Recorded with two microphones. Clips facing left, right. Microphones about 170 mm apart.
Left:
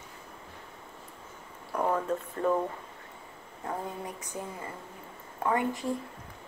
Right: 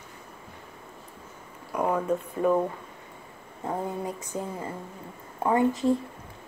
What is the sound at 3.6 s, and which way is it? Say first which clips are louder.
Speech: right 5 dB; 20° right (ahead or behind).